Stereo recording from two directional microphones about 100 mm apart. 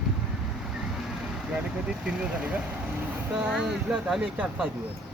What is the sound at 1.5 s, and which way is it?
Speech, 10° right (ahead or behind).